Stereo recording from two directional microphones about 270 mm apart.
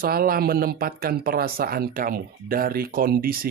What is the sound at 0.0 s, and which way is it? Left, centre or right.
Speech, right.